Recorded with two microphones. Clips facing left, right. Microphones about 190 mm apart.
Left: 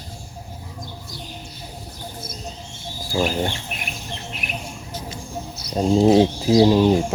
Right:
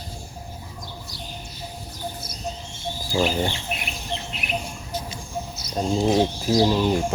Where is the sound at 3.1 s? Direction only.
Centre (ahead or behind).